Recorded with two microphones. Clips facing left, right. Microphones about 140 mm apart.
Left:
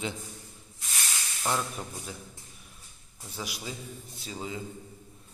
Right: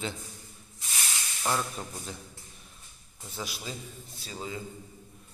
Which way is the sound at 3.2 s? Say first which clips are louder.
Even; 15° left (ahead or behind).